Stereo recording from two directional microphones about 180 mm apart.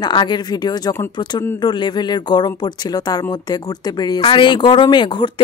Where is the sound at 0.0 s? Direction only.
25° left (ahead or behind).